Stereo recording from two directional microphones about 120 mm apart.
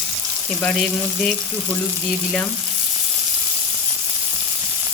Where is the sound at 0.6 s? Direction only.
Centre (ahead or behind).